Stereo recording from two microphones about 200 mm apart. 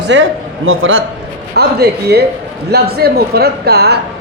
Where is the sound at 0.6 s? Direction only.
90° right.